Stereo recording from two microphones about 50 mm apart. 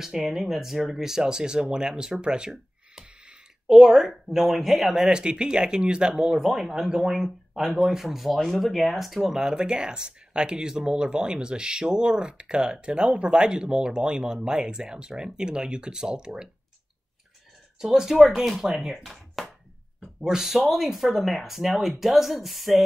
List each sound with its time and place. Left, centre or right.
0.0 s speech: centre
17.7 s speech: centre
19.0 s a sound: centre
20.2 s speech: centre